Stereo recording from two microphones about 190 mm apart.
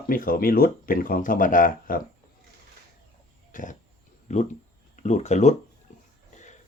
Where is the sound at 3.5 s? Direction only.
45° left (ahead or behind).